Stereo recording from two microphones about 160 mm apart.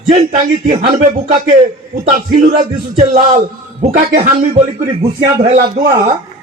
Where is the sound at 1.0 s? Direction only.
50° right (ahead or behind).